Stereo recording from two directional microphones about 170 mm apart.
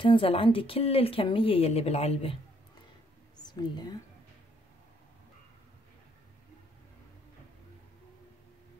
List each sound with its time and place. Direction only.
0.0 s speech: 30° left (ahead or behind)
3.5 s speech: 25° left (ahead or behind)